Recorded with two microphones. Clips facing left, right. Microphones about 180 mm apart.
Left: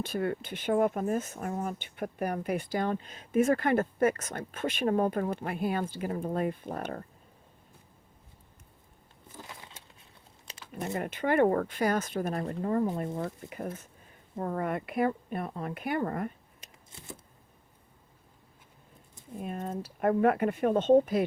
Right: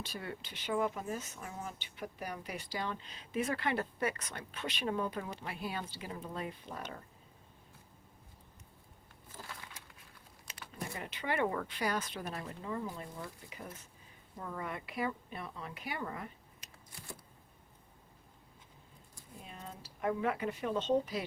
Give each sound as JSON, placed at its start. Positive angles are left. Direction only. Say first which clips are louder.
{"t": 0.0, "sound": "speech", "louder": "left 12 dB", "side_deg": 55}
{"t": 9.4, "sound": "crumpling", "louder": "left 2 dB", "side_deg": 20}
{"t": 10.9, "sound": "speech", "louder": "left 10 dB", "side_deg": 50}
{"t": 19.4, "sound": "speech", "louder": "left 14 dB", "side_deg": 55}